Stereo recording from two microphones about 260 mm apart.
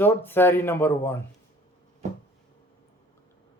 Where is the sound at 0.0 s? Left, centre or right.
Centre.